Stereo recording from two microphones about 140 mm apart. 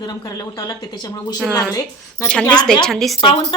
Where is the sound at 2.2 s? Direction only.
10° left (ahead or behind).